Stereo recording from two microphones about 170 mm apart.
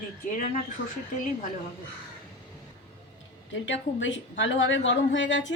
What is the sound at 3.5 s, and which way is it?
A woman's voice, 90° left.